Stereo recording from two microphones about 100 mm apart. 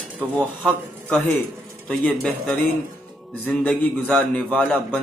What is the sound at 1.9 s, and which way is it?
A man's voice, 10° left (ahead or behind).